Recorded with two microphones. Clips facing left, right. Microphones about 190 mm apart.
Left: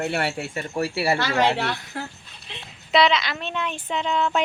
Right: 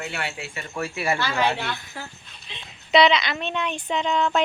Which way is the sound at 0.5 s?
35° left (ahead or behind).